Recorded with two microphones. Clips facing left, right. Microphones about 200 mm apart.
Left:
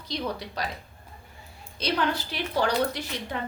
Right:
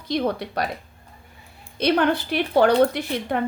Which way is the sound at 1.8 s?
60° right (ahead or behind).